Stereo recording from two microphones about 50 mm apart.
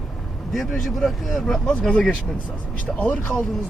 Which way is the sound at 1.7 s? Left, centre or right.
Left.